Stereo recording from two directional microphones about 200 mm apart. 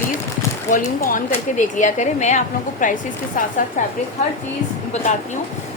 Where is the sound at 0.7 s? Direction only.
40° left (ahead or behind).